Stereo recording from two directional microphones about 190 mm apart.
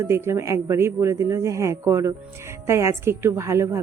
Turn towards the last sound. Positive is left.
turn(degrees=-15)  # may be behind; listen again after turning